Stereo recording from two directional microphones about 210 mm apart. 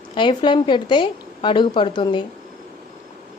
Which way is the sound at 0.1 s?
20° left (ahead or behind).